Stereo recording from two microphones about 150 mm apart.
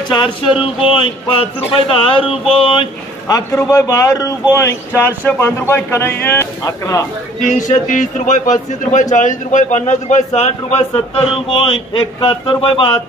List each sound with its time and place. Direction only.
0.1 s speech: 35° left (ahead or behind); by 7.0 s 20° left (ahead or behind)
7.3 s a man's voice: 55° left (ahead or behind); by 13.0 s 35° left (ahead or behind)